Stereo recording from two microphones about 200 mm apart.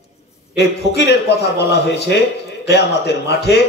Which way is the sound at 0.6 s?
55° left (ahead or behind).